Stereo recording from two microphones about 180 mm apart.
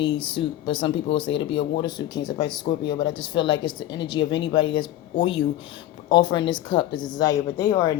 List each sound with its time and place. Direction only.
0.0 s speech: 25° left (ahead or behind)
6.1 s speech: 25° left (ahead or behind)